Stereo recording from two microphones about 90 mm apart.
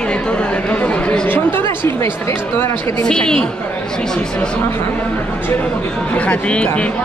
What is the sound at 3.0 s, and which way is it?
Speech, 10° left (ahead or behind).